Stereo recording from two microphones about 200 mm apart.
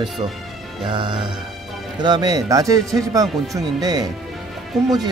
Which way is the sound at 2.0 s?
20° right (ahead or behind).